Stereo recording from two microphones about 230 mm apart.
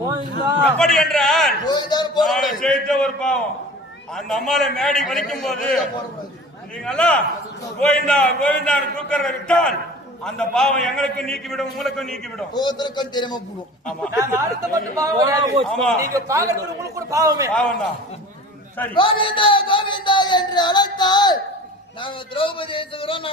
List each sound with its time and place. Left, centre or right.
0.0 s a man's voice: centre
0.6 s a man's voice: centre
1.6 s a sound: centre
2.2 s a sound: centre
4.1 s a man's voice: centre
6.8 s a man's voice: centre
12.5 s a sound: centre
14.7 s a man's voice: centre
15.6 s a man's voice: centre
16.1 s a man's voice: centre
17.5 s a man's voice: centre
18.9 s a sound: left